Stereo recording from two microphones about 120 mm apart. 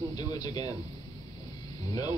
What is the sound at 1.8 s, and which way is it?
Speech, 30° left (ahead or behind).